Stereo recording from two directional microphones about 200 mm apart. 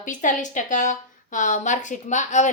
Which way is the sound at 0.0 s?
40° left (ahead or behind).